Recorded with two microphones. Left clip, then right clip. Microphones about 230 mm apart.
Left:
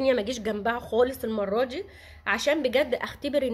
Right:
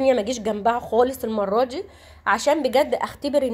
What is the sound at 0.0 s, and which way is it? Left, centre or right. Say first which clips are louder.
A woman's voice: right 5 dB; centre.